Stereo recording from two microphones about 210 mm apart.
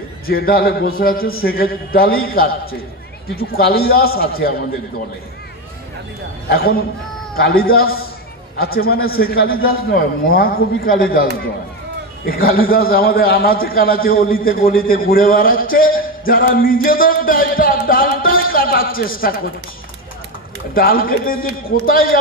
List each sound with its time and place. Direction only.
0.3 s a man's voice: 45° left (ahead or behind)
7.3 s a man's voice: 45° left (ahead or behind)
12.4 s a man's voice: 45° left (ahead or behind)
20.7 s a man's voice: 45° left (ahead or behind)